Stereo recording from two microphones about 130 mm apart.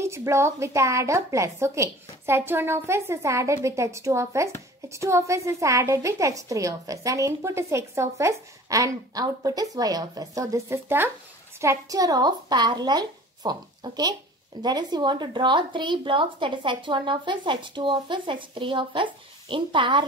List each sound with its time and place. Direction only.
0.0 s a woman's voice: 20° right (ahead or behind); by 20.1 s 40° right (ahead or behind)